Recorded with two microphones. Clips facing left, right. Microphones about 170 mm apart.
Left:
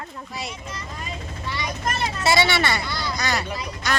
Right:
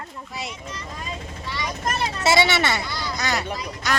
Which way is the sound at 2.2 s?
20° right (ahead or behind).